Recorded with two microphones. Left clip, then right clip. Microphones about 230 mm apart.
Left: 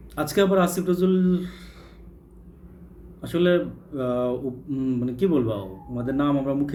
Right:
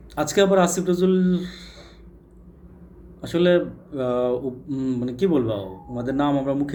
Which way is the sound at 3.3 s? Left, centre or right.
Centre.